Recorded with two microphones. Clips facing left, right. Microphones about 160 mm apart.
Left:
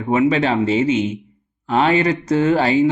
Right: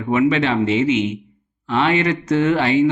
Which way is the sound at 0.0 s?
35° left (ahead or behind).